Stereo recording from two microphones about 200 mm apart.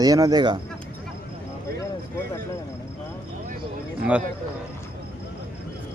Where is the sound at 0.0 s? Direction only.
20° right (ahead or behind).